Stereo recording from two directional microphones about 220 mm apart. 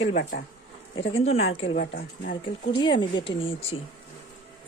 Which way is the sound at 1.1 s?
30° left (ahead or behind).